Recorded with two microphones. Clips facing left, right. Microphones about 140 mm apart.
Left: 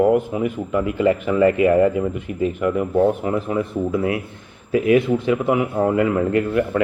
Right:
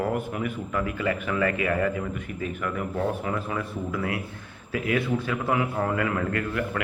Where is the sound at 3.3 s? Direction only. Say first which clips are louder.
Left 8 dB; 20° left (ahead or behind).